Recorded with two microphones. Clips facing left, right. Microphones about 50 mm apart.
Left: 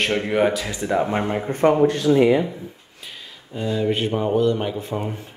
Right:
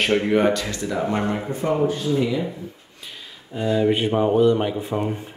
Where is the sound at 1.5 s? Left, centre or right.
Left.